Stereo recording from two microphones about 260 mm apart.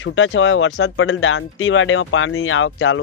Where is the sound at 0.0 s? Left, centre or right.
Left.